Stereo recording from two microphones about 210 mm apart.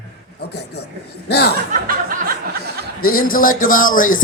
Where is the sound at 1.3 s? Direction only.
50° left (ahead or behind).